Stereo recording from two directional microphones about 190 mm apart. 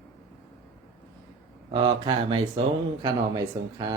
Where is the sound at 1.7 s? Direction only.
25° right (ahead or behind).